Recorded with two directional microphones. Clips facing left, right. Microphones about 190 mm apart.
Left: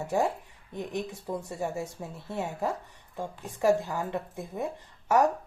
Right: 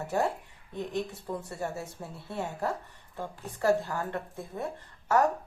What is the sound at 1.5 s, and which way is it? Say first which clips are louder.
A woman's voice: left 3 dB; 15° left (ahead or behind).